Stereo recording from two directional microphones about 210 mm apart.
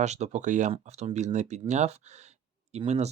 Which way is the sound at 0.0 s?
35° right (ahead or behind).